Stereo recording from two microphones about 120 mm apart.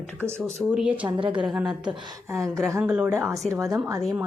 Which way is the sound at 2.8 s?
10° right (ahead or behind).